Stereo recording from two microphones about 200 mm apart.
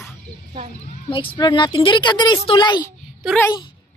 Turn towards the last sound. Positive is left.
turn(degrees=5)  # may be behind; listen again after turning